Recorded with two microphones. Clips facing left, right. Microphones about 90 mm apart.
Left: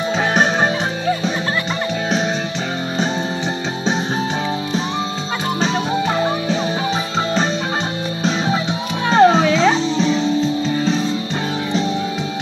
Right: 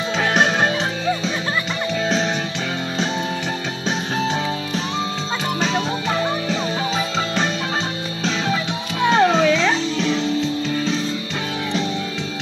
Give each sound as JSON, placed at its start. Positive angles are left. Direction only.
{"t": 0.3, "sound": "music", "side_deg": 15}
{"t": 6.1, "sound": "music", "side_deg": 15}
{"t": 8.2, "sound": "music", "side_deg": 20}